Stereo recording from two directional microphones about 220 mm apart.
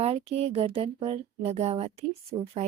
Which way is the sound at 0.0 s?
30° right (ahead or behind).